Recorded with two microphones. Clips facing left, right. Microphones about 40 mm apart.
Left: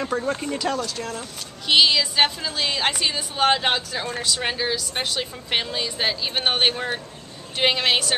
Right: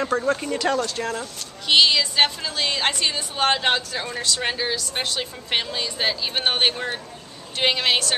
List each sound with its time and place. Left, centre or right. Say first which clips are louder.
0.1 s speech: right 2 dB; centre
0.9 s speech: right 4 dB; right
1.7 s speech: even; centre